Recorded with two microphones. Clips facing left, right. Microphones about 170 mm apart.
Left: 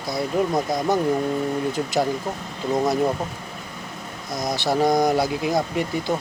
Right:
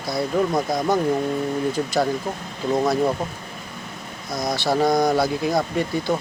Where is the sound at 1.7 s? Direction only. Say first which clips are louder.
Right 1 dB; 20° left (ahead or behind).